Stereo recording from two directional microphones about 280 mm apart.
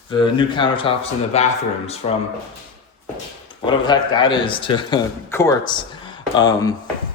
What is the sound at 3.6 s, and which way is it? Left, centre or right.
Speech, centre.